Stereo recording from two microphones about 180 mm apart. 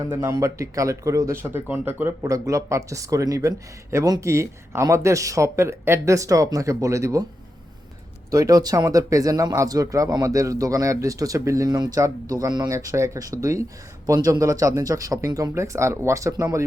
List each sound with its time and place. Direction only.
0.0 s speech: 15° right (ahead or behind)
8.3 s speech: 20° right (ahead or behind)